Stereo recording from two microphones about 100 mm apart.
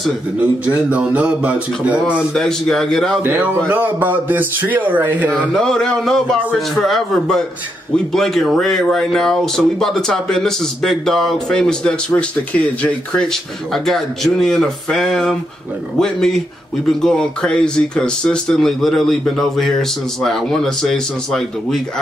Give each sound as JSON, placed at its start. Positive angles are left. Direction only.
{"t": 0.4, "sound": "speech", "side_deg": -15}
{"t": 2.3, "sound": "a man's voice", "side_deg": 5}
{"t": 3.2, "sound": "speech", "side_deg": -20}
{"t": 5.5, "sound": "a man's voice", "side_deg": 5}